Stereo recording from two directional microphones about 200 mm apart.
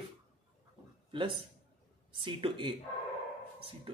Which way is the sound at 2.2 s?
25° right (ahead or behind).